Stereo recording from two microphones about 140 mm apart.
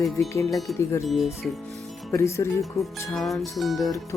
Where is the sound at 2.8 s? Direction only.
Centre (ahead or behind).